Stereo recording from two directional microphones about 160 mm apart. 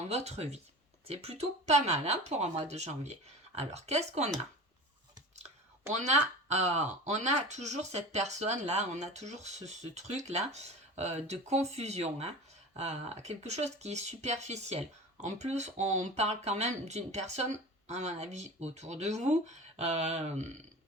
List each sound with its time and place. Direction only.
0.1 s speech: 40° right (ahead or behind)
5.9 s speech: 45° right (ahead or behind)